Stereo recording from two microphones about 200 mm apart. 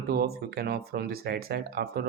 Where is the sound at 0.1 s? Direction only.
50° right (ahead or behind).